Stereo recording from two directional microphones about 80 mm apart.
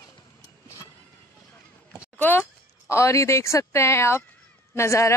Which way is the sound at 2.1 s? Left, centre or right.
Left.